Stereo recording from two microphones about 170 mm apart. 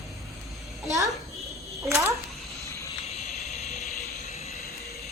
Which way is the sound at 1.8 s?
15° right (ahead or behind).